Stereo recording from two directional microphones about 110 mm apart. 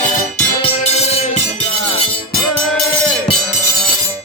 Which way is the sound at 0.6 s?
75° left (ahead or behind).